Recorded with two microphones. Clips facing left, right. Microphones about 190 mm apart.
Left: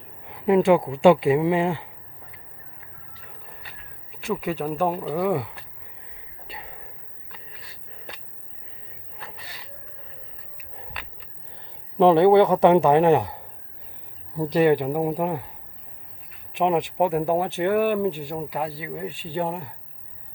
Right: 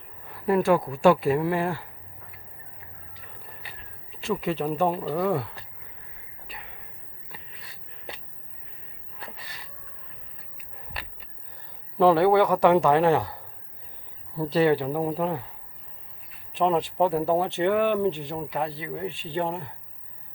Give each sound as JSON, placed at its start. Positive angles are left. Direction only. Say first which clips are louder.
{"t": 0.3, "sound": "speech", "louder": "left 4 dB", "side_deg": 20}
{"t": 4.2, "sound": "speech", "louder": "even", "side_deg": 0}
{"t": 6.5, "sound": "a sound", "louder": "left 4 dB", "side_deg": 35}
{"t": 11.9, "sound": "a man's voice", "louder": "left 4 dB", "side_deg": 20}
{"t": 16.6, "sound": "speech", "louder": "left 1 dB", "side_deg": 15}